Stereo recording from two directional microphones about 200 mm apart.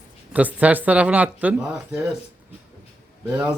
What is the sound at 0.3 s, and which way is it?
Speech, 5° right (ahead or behind).